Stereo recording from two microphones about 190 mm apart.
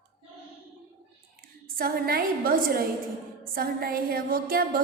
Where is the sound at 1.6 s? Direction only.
50° right (ahead or behind).